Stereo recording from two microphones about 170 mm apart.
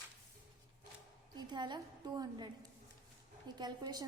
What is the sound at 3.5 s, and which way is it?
Speech, 25° right (ahead or behind).